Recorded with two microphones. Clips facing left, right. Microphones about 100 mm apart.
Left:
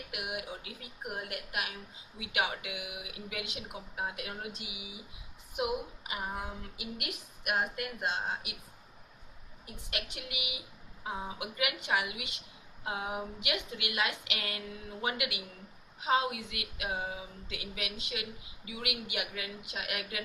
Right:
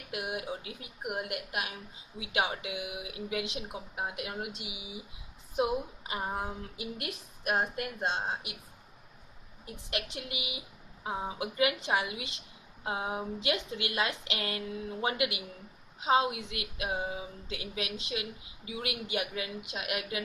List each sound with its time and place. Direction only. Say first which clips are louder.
0.1 s a woman's voice: right 5 dB; 25° right (ahead or behind)
9.6 s a woman's voice: right 4 dB; 25° right (ahead or behind)